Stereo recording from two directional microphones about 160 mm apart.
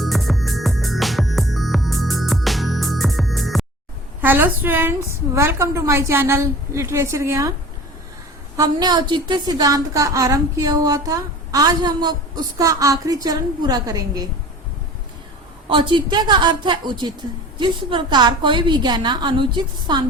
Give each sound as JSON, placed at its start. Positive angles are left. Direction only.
{"t": 0.0, "sound": "music", "side_deg": 0}
{"t": 4.2, "sound": "a woman's voice", "side_deg": -10}
{"t": 8.5, "sound": "a woman's voice", "side_deg": -25}
{"t": 15.7, "sound": "a woman's voice", "side_deg": -30}